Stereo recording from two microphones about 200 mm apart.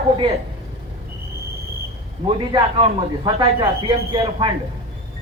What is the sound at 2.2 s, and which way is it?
A woman's voice, 25° right (ahead or behind).